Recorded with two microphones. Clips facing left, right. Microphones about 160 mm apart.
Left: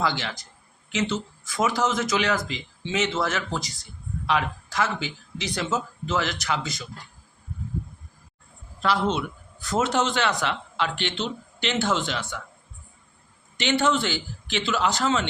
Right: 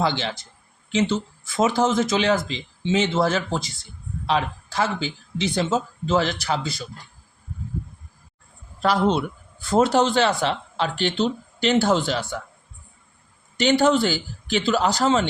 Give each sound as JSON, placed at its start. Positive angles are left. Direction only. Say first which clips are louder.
{"t": 0.0, "sound": "speech", "louder": "right 3 dB", "side_deg": -30}
{"t": 8.8, "sound": "speech", "louder": "right 4 dB", "side_deg": -35}
{"t": 13.6, "sound": "speech", "louder": "right 5 dB", "side_deg": -40}